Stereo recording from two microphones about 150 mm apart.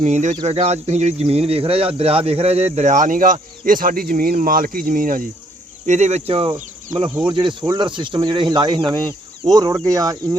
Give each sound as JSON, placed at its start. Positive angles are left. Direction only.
{"t": 0.0, "sound": "speech", "side_deg": -50}
{"t": 5.8, "sound": "speech", "side_deg": -50}
{"t": 6.5, "sound": "speech", "side_deg": -25}